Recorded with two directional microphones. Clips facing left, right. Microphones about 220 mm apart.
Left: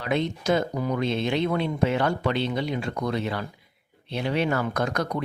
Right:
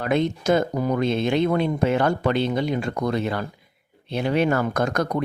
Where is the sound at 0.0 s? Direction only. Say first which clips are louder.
Right 4 dB; 50° right (ahead or behind).